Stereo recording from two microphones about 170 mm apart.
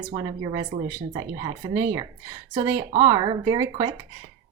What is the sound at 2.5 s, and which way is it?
Speech, 25° right (ahead or behind).